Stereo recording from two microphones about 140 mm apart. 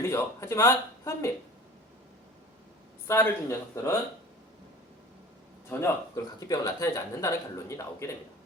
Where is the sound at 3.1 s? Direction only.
20° left (ahead or behind).